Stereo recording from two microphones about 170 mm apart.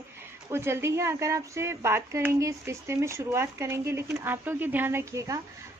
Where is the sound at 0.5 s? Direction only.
15° right (ahead or behind).